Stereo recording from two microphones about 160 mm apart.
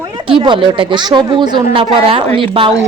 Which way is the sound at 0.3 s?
30° right (ahead or behind).